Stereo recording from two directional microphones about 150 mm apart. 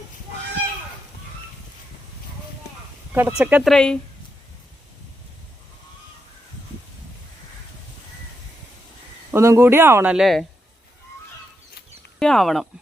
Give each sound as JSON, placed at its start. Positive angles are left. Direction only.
{"t": 3.1, "sound": "speech", "side_deg": -10}
{"t": 3.7, "sound": "speech", "side_deg": 5}
{"t": 9.3, "sound": "speech", "side_deg": -15}
{"t": 12.2, "sound": "speech", "side_deg": 0}